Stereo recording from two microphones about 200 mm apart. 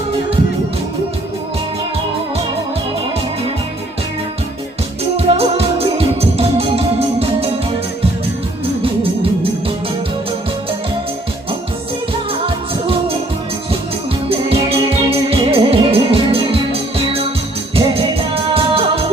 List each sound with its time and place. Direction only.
5.1 s music: 30° right (ahead or behind)
12.3 s music: 30° right (ahead or behind)
14.3 s music: 30° right (ahead or behind)
17.7 s music: 30° right (ahead or behind)